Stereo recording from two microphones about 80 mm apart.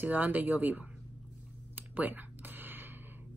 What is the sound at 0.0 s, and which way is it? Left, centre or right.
Speech, right.